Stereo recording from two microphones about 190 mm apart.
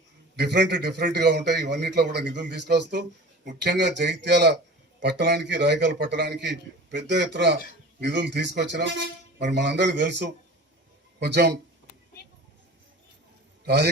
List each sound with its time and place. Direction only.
0.3 s a man's voice: 60° right (ahead or behind)
13.7 s a man's voice: 60° right (ahead or behind)